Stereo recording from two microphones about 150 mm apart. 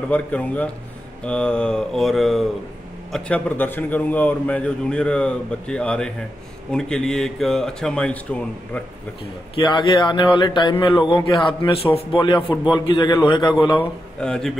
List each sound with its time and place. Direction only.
0.1 s a man's voice: 10° left (ahead or behind)
9.6 s a man's voice: 35° left (ahead or behind)
13.7 s speech: 5° left (ahead or behind)